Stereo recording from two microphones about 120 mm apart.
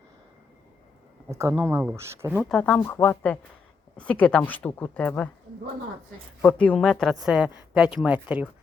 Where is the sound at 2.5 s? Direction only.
10° left (ahead or behind).